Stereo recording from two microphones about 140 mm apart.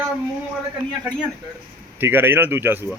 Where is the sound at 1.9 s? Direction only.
15° right (ahead or behind).